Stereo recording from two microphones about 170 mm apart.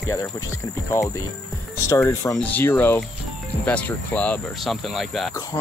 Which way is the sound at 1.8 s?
15° left (ahead or behind).